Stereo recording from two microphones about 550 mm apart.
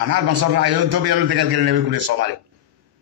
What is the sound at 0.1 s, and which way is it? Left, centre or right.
A man's voice, right.